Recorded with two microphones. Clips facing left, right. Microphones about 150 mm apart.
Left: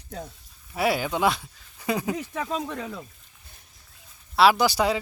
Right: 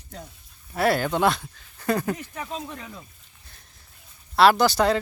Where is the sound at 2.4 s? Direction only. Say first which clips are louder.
Left 4 dB; 90° left.